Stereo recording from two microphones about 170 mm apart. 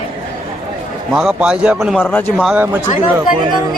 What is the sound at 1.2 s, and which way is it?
Speech, 5° right (ahead or behind).